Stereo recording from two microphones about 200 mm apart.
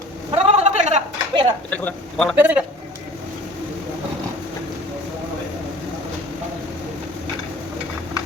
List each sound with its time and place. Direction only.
0.3 s a sound: 30° right (ahead or behind)
1.7 s speech: 5° left (ahead or behind)
2.4 s a man's voice: 5° right (ahead or behind)